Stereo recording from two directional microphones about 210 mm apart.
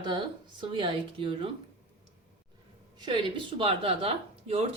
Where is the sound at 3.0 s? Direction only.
20° right (ahead or behind).